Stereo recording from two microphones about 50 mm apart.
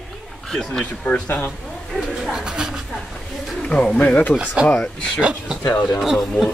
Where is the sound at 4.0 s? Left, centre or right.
Left.